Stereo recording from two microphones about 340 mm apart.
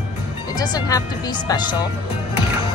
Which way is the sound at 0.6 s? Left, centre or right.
Centre.